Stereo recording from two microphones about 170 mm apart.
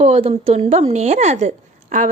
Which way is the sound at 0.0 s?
35° right (ahead or behind).